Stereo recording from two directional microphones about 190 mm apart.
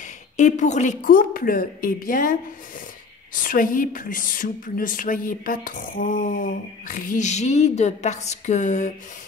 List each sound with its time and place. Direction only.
0.0 s a woman's voice: 40° left (ahead or behind)
3.4 s a woman's voice: 45° left (ahead or behind)